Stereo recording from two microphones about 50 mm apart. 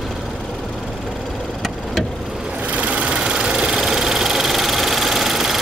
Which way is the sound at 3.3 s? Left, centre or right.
Centre.